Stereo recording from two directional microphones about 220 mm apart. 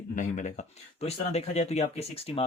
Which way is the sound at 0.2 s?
35° left (ahead or behind).